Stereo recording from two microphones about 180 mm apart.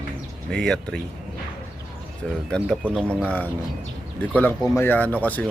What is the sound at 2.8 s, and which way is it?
Speech, 5° left (ahead or behind).